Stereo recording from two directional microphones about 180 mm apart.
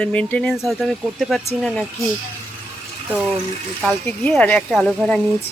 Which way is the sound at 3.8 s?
10° left (ahead or behind).